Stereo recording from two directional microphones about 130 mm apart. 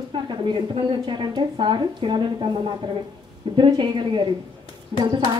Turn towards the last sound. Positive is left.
turn(degrees=-35)  # may be behind; listen again after turning